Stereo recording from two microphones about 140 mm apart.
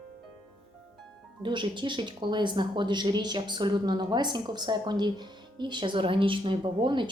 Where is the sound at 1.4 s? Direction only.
35° right (ahead or behind).